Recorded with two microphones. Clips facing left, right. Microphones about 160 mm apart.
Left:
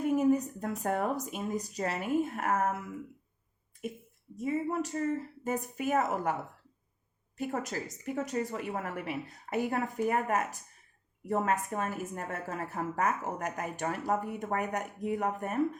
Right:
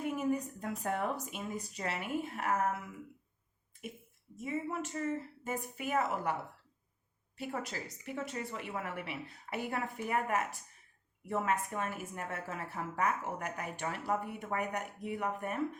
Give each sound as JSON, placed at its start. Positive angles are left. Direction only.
{"t": 0.0, "sound": "a sound", "side_deg": 40}
{"t": 0.8, "sound": "speech", "side_deg": 45}
{"t": 4.4, "sound": "a woman's voice", "side_deg": 40}
{"t": 7.3, "sound": "a woman's voice", "side_deg": 45}